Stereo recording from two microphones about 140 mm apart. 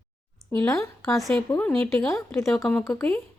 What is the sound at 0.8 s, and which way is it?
Speech, 20° left (ahead or behind).